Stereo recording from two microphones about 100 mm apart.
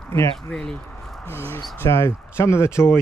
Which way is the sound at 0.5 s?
5° left (ahead or behind).